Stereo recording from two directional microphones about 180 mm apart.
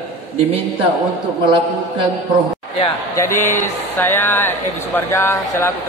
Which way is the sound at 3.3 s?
45° left (ahead or behind).